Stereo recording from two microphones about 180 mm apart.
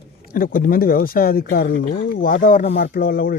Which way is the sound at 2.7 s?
60° left (ahead or behind).